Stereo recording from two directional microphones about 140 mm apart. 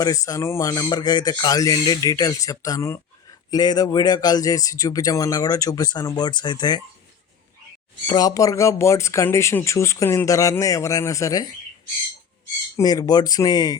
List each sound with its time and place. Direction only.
0.0 s speech: 25° left (ahead or behind)
8.0 s speech: 30° left (ahead or behind)
12.7 s speech: 25° left (ahead or behind)